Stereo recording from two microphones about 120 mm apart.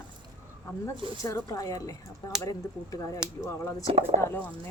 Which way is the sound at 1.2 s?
25° left (ahead or behind).